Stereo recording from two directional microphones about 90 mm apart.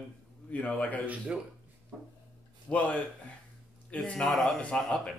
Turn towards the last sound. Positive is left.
turn(degrees=10)  # may be behind; listen again after turning